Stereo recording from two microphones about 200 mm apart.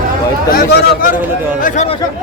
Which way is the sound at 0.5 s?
45° left (ahead or behind).